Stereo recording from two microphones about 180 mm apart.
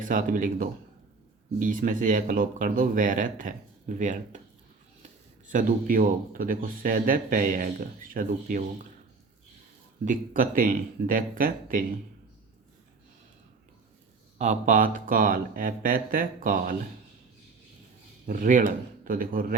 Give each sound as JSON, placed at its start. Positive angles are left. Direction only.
{"t": 0.0, "sound": "speech", "side_deg": -45}
{"t": 5.5, "sound": "speech", "side_deg": -45}
{"t": 10.1, "sound": "speech", "side_deg": -50}
{"t": 14.3, "sound": "speech", "side_deg": -40}
{"t": 18.3, "sound": "speech", "side_deg": -45}